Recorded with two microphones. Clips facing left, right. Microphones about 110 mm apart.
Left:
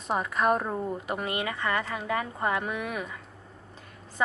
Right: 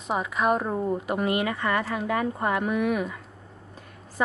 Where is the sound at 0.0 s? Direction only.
Centre (ahead or behind).